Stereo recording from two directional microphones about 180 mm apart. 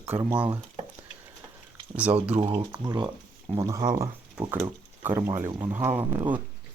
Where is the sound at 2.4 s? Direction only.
35° right (ahead or behind).